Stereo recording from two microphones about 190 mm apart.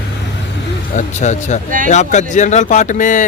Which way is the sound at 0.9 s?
40° left (ahead or behind).